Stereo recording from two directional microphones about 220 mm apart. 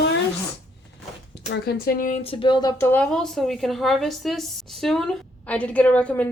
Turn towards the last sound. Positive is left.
turn(degrees=5)  # may be behind; listen again after turning